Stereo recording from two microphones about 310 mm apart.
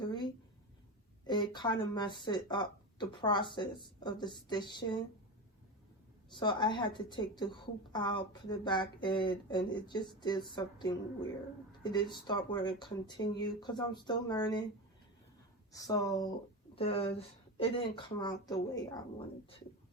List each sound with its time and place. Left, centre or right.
0.1 s a sound: centre
1.3 s speech: centre
6.3 s speech: centre
15.7 s speech: centre